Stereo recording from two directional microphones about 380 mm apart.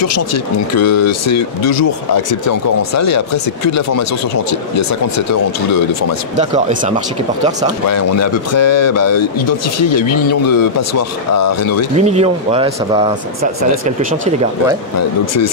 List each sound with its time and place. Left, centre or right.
0.0 s speech: left
6.3 s speech: centre
7.9 s speech: left
12.0 s speech: centre
15.0 s speech: left